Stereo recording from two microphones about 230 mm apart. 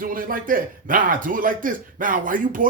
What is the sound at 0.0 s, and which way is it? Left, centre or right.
Speech, right.